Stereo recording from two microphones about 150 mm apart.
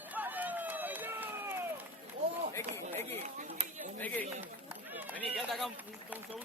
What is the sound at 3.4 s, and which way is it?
Run, 60° right (ahead or behind).